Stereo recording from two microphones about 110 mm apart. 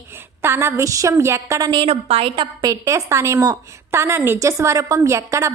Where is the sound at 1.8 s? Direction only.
60° right (ahead or behind).